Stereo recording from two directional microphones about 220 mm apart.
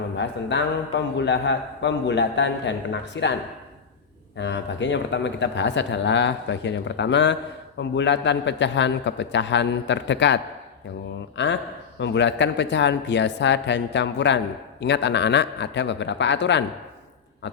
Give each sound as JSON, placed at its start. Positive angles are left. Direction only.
{"t": 0.2, "sound": "a man's voice", "side_deg": 55}
{"t": 4.4, "sound": "a man's voice", "side_deg": 55}